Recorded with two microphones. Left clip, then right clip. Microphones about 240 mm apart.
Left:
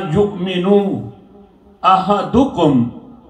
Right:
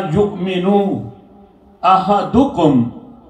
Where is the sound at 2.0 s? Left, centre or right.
Left.